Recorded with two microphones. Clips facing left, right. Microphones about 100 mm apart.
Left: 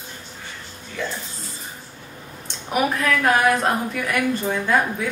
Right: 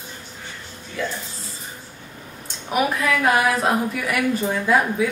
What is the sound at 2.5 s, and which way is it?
A woman's voice, centre (ahead or behind).